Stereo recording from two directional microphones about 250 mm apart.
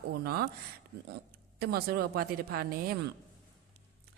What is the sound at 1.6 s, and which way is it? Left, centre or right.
Speech, right.